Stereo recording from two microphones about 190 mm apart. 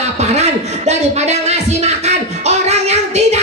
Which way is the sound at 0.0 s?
35° right (ahead or behind).